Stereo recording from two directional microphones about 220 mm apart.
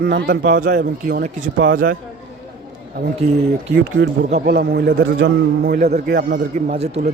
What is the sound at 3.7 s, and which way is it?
A man's voice, 55° right (ahead or behind).